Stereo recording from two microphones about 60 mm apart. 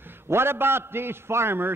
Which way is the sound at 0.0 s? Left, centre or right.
Right.